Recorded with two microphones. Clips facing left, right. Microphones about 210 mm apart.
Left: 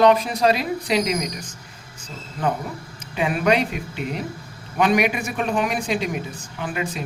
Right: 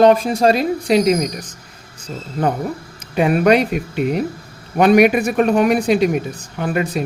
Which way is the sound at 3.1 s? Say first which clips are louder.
Right 7 dB; 50° right (ahead or behind).